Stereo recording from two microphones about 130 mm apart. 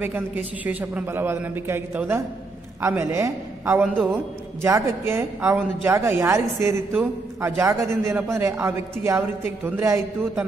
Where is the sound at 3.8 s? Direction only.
5° right (ahead or behind).